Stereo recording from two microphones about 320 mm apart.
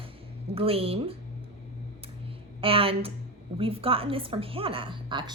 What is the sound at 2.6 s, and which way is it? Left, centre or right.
Speech, centre.